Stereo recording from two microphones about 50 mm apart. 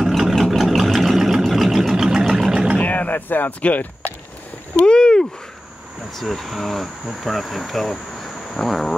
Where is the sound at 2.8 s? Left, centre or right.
Left.